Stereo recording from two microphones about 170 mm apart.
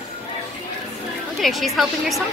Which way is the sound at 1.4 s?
Centre (ahead or behind).